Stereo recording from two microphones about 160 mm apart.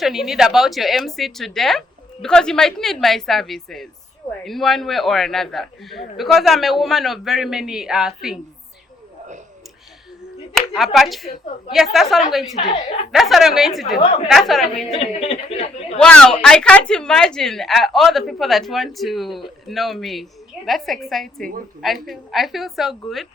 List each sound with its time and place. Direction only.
0.0 s speech: centre (ahead or behind)
10.5 s speech: centre (ahead or behind)
12.5 s speech: 40° left (ahead or behind)
13.1 s speech: centre (ahead or behind)
14.0 s a woman's voice: 40° left (ahead or behind)
14.3 s speech: centre (ahead or behind)
14.8 s a woman's voice: 40° left (ahead or behind)
16.0 s speech: 5° left (ahead or behind)